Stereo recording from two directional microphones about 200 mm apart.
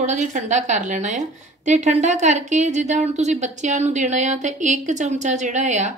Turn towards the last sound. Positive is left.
turn(degrees=-35)  # may be behind; listen again after turning